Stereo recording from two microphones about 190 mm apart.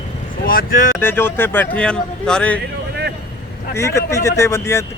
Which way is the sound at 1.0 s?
10° left (ahead or behind).